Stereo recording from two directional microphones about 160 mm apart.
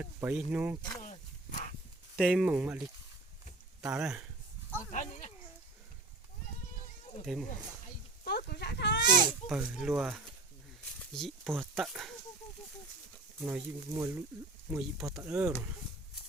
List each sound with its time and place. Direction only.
0.0 s speech: 10° right (ahead or behind)
0.8 s speech: 25° left (ahead or behind)
1.0 s dog: 50° left (ahead or behind)
2.1 s speech: centre (ahead or behind)
2.5 s speech: 10° right (ahead or behind)
4.9 s a sound: 50° left (ahead or behind)
7.3 s speech: centre (ahead or behind)
8.2 s livestock: 75° left (ahead or behind)
9.5 s speech: 5° right (ahead or behind)
13.4 s speech: 15° right (ahead or behind)
14.7 s speech: 5° right (ahead or behind)